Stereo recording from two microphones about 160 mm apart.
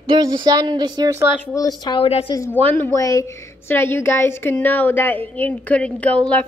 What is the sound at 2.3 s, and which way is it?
A woman's voice, 15° left (ahead or behind).